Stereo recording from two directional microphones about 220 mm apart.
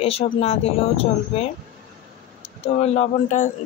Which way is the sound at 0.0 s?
25° left (ahead or behind).